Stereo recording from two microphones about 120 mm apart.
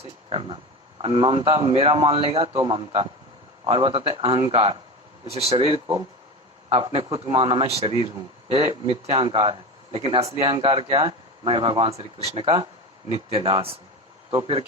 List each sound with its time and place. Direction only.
0.3 s speech: 50° right (ahead or behind)
9.2 s speech: 45° right (ahead or behind)